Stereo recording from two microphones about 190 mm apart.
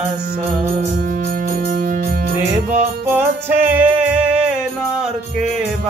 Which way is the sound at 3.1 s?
10° right (ahead or behind).